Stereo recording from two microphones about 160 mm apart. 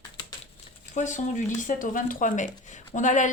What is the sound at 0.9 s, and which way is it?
A woman's voice, 50° left (ahead or behind).